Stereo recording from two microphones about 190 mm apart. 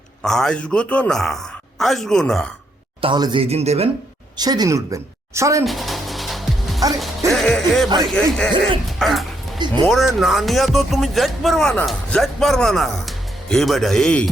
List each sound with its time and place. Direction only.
0.2 s speech: centre (ahead or behind)
3.0 s speech: 25° right (ahead or behind)
4.4 s a woman's voice: 20° right (ahead or behind)
5.6 s music: centre (ahead or behind)
8.0 s speech: 5° left (ahead or behind)